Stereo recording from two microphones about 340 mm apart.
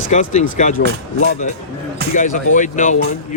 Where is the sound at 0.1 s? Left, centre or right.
Left.